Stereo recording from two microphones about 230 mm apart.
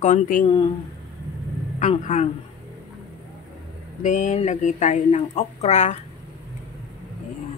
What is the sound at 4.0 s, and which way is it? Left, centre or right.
Speech, left.